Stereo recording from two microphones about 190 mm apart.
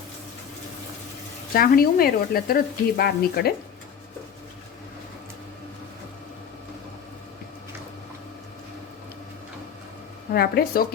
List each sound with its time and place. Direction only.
1.5 s speech: 50° left (ahead or behind)
10.3 s speech: 55° left (ahead or behind)